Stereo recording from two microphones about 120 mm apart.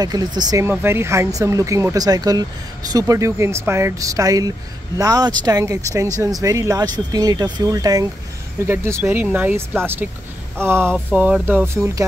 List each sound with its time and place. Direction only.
0.0 s speech: 35° right (ahead or behind)
0.7 s speech: 20° right (ahead or behind)